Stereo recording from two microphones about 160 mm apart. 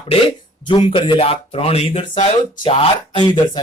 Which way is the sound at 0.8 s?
35° left (ahead or behind).